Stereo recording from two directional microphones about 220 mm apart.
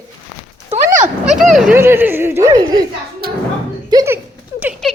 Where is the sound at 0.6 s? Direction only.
30° right (ahead or behind).